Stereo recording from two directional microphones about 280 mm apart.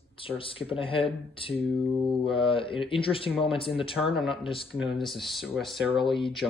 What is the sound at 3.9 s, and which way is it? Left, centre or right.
Speech, centre.